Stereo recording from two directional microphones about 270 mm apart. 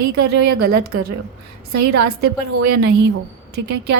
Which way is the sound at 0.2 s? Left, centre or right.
Right.